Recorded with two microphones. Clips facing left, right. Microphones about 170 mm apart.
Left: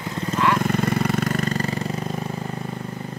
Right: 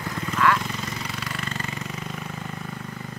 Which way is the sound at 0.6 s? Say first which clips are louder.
Left 11 dB; 55° left (ahead or behind).